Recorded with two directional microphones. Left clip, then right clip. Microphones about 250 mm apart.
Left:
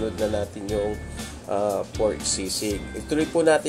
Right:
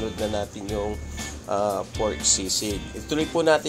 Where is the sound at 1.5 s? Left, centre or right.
Centre.